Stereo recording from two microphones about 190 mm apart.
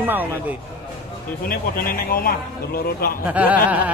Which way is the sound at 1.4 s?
50° left (ahead or behind).